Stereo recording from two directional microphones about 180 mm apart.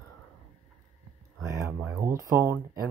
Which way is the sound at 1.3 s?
15° right (ahead or behind).